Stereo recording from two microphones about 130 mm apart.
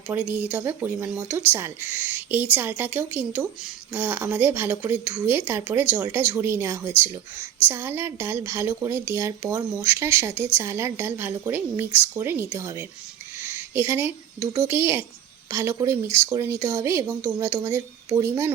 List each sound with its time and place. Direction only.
0.1 s a woman's voice: 10° right (ahead or behind)
13.5 s a sound: 15° right (ahead or behind)
14.6 s speech: 20° right (ahead or behind)